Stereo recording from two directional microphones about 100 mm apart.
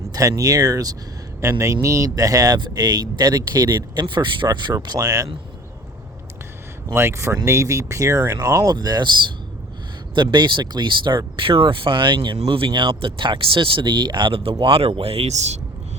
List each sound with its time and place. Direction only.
0.1 s speech: 35° right (ahead or behind)
6.9 s speech: 25° right (ahead or behind); by 9.0 s 45° right (ahead or behind)
10.2 s speech: 50° right (ahead or behind); by 15.5 s 90° right